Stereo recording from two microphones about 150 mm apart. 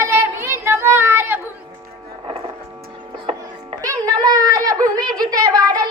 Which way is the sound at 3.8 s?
25° right (ahead or behind).